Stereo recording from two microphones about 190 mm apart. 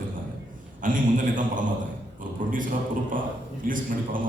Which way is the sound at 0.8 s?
45° right (ahead or behind).